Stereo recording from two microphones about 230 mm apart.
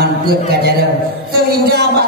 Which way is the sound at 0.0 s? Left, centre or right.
Right.